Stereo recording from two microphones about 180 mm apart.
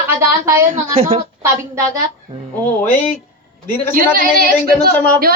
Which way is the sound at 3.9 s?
50° right (ahead or behind).